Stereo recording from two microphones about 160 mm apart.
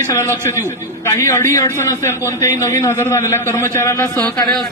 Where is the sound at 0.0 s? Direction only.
15° left (ahead or behind).